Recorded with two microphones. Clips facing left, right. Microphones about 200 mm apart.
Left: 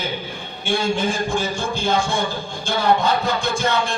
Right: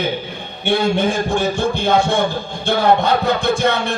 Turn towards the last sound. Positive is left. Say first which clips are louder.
# right 4 dB
turn(degrees=-60)  # may be behind; listen again after turning